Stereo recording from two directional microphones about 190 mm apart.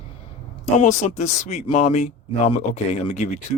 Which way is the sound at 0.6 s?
35° left (ahead or behind).